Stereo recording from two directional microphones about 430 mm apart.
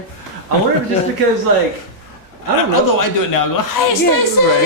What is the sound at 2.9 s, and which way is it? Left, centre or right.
A man's voice, left.